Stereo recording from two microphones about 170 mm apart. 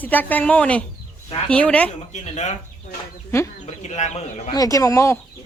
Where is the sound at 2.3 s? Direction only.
40° left (ahead or behind).